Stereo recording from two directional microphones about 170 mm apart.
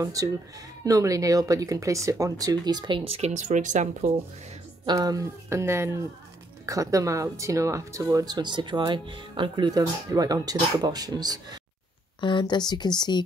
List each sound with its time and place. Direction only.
0.0 s speech: 20° right (ahead or behind); by 4.1 s 45° right (ahead or behind)
4.8 s speech: 20° right (ahead or behind)
12.2 s speech: 25° left (ahead or behind)